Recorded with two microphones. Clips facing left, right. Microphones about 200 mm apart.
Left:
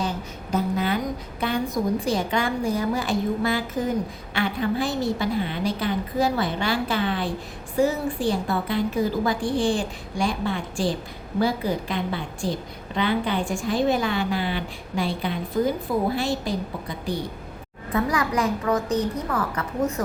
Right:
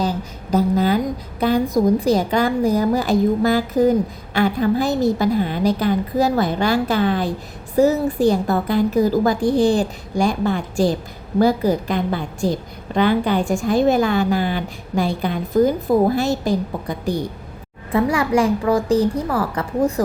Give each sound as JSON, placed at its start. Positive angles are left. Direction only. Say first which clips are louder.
{"t": 0.5, "sound": "a woman's voice", "louder": "right 7 dB", "side_deg": -35}
{"t": 17.9, "sound": "a woman's voice", "louder": "right 6 dB", "side_deg": -30}